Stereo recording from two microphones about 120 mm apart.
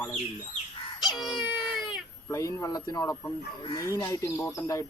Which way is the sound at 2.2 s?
25° left (ahead or behind).